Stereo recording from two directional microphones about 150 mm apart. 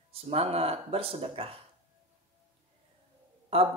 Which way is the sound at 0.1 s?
40° right (ahead or behind).